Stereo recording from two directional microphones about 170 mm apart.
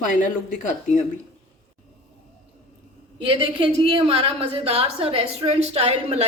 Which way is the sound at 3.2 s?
30° right (ahead or behind).